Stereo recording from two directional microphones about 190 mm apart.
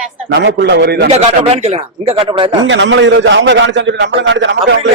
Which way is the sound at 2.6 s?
75° right (ahead or behind).